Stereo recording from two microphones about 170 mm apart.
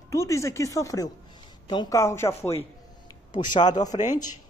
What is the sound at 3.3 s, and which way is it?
Speech, 25° left (ahead or behind).